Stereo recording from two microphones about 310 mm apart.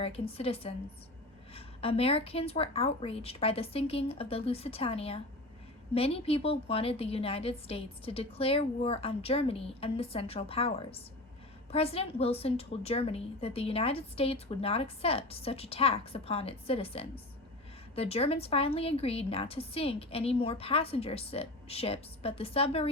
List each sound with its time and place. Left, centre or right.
0.0 s a woman's voice: centre